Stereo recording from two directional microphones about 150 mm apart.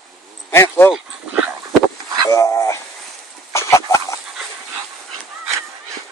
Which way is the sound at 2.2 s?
20° left (ahead or behind).